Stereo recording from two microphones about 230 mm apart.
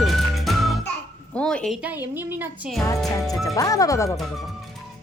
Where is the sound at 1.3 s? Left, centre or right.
Centre.